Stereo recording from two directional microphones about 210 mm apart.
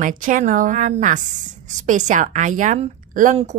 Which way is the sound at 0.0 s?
40° right (ahead or behind).